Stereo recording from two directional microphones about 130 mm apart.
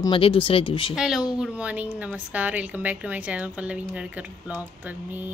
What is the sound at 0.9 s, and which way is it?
A child's voice, 5° right (ahead or behind).